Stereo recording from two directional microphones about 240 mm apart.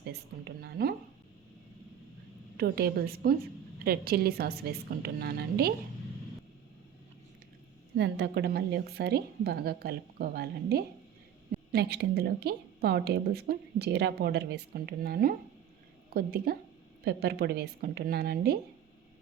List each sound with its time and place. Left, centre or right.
0.0 s a sound: right
2.6 s a woman's voice: right
7.9 s a woman's voice: right